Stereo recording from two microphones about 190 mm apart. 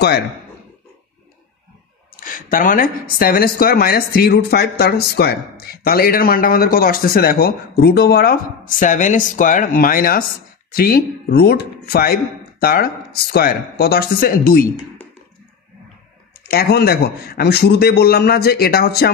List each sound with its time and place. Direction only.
2.1 s speech: 45° left (ahead or behind)
16.4 s a man's voice: 55° left (ahead or behind)